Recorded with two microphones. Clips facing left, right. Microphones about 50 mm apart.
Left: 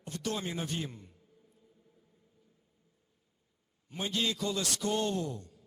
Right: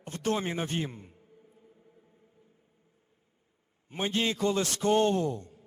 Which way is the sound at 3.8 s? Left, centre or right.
Right.